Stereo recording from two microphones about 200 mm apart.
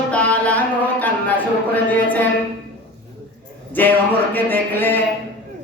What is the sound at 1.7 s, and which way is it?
Speech, 10° left (ahead or behind).